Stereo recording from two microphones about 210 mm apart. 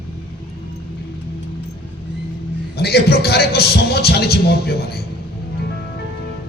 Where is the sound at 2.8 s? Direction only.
50° left (ahead or behind).